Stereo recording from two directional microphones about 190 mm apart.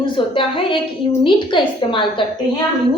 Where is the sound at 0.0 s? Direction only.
25° left (ahead or behind).